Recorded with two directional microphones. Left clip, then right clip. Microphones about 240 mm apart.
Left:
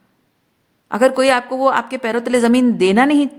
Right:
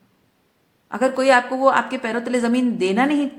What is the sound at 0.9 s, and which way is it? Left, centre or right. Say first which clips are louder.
Speech: left 3 dB; left.